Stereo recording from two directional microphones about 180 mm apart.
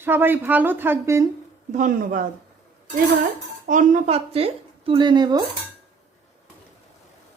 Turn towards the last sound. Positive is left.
turn(degrees=-25)  # may be behind; listen again after turning